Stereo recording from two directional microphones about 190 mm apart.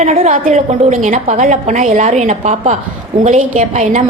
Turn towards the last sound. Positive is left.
turn(degrees=-40)  # may be behind; listen again after turning